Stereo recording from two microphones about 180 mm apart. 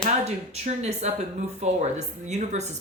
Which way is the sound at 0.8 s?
40° right (ahead or behind).